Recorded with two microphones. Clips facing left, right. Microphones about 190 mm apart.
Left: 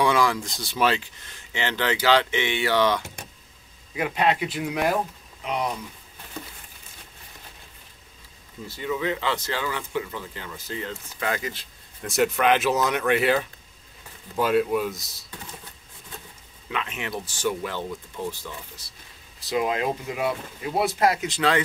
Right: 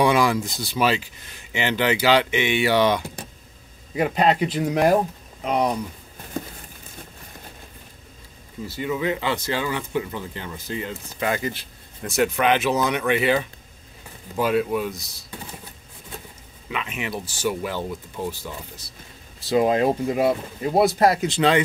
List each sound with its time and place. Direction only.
0.0 s speech: 15° right (ahead or behind)
3.9 s speech: 35° right (ahead or behind)
8.7 s speech: 15° right (ahead or behind)
12.0 s speech: centre (ahead or behind)
16.6 s speech: 5° right (ahead or behind)
19.5 s speech: 35° right (ahead or behind)